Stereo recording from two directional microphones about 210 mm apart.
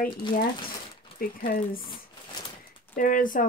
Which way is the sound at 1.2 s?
45° left (ahead or behind).